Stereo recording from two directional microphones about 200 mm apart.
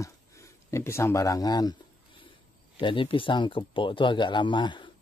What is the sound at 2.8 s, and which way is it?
Speech, 25° left (ahead or behind).